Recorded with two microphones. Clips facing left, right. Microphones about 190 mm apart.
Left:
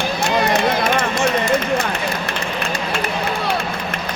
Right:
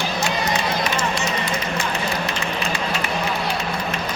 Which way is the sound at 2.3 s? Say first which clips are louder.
Left 1 dB; 55° left (ahead or behind).